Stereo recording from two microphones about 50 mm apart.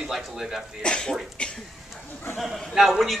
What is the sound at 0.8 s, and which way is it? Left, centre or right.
Speech, centre.